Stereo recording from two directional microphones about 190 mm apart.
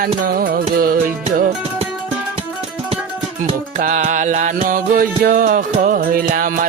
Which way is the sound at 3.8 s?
45° right (ahead or behind).